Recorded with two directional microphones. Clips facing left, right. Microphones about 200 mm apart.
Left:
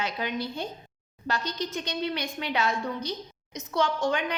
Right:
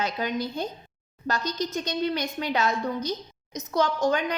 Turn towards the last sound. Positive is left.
turn(degrees=-40)  # may be behind; listen again after turning